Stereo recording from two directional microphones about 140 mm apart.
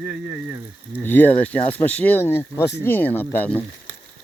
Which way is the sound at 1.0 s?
15° left (ahead or behind).